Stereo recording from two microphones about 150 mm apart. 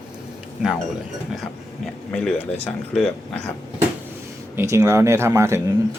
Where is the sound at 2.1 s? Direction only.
5° left (ahead or behind).